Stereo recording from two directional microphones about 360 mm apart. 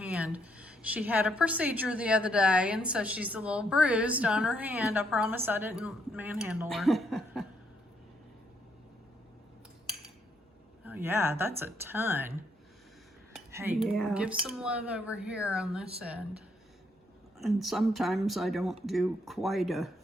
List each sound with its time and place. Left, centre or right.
0.0 s a woman's voice: centre
10.8 s speech: centre
13.3 s a woman's voice: centre
17.4 s a woman's voice: centre